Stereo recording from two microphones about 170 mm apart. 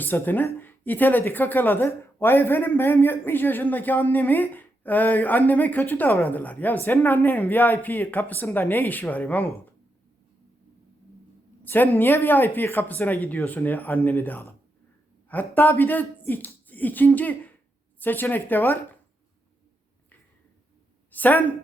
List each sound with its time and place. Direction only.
0.0 s speech: 10° left (ahead or behind)
11.6 s speech: 10° left (ahead or behind)
21.1 s a woman's voice: 10° left (ahead or behind)